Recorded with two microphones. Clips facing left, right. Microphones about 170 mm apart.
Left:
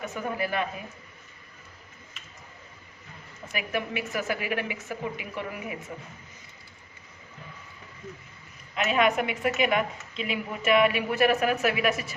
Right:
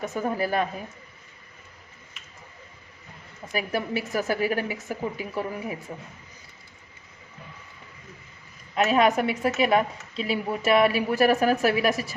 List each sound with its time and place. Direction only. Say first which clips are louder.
0.2 s a woman's voice: right 4 dB; 40° right (ahead or behind)
3.5 s a woman's voice: right 3 dB; 35° right (ahead or behind)
8.7 s a woman's voice: right 3 dB; 35° right (ahead or behind)